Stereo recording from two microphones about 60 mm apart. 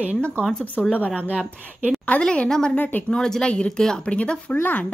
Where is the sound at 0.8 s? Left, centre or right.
Left.